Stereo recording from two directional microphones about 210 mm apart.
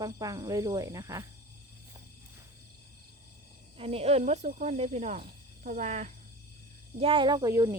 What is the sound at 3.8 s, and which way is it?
A child's voice, 30° right (ahead or behind).